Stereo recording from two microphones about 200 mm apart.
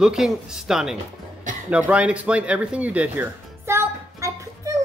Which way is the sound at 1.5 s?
40° right (ahead or behind).